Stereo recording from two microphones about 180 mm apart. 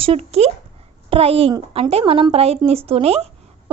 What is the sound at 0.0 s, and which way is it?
A woman's voice, 35° right (ahead or behind).